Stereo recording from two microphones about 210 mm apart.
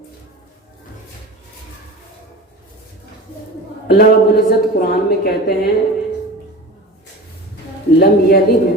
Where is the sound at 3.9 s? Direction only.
45° left (ahead or behind).